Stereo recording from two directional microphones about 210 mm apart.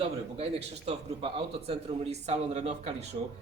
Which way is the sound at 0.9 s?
25° right (ahead or behind).